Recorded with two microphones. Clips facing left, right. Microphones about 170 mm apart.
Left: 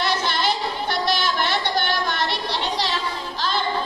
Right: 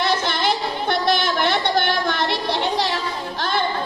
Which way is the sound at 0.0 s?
55° right (ahead or behind).